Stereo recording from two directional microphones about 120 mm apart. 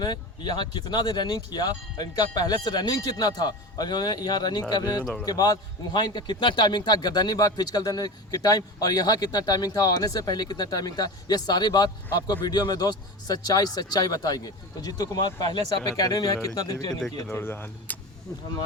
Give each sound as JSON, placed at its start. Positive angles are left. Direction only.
{"t": 0.0, "sound": "a man's voice", "side_deg": 35}
{"t": 17.3, "sound": "speech", "side_deg": 20}